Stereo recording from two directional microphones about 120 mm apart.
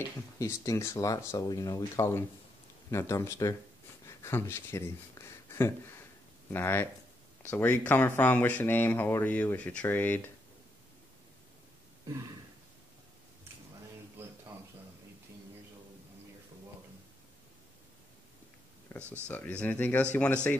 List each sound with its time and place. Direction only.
0.4 s speech: 25° left (ahead or behind)
18.9 s speech: 15° left (ahead or behind)